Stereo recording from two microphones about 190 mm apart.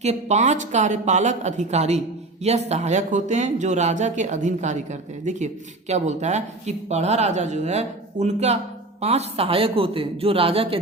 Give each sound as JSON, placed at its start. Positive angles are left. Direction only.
{"t": 0.0, "sound": "a man's voice", "side_deg": -35}